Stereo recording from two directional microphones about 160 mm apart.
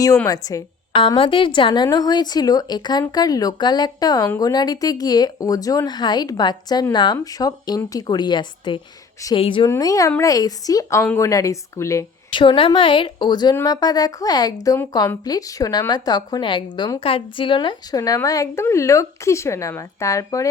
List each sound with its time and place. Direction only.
0.3 s speech: 20° left (ahead or behind)
12.3 s speech: 30° left (ahead or behind)